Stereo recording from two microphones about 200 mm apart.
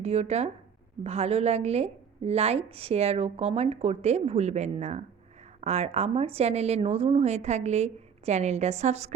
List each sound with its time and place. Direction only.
0.0 s a woman's voice: 30° right (ahead or behind)